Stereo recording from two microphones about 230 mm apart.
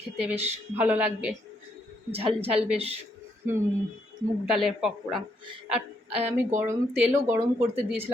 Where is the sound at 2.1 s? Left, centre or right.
Right.